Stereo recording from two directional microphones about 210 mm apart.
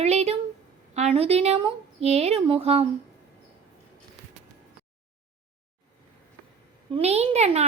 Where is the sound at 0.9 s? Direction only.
30° right (ahead or behind).